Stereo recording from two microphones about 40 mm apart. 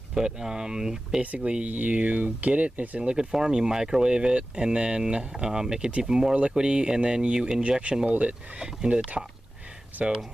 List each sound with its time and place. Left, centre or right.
0.1 s speech: centre
1.2 s speech: right
3.0 s speech: right
8.1 s speech: right
9.9 s speech: right